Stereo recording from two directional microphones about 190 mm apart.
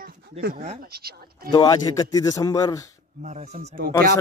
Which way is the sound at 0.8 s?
55° right (ahead or behind).